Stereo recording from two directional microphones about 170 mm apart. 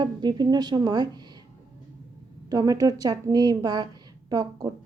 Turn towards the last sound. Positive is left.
turn(degrees=-20)  # may be behind; listen again after turning